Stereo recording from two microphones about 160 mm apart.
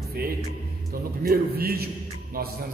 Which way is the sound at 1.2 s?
70° right (ahead or behind).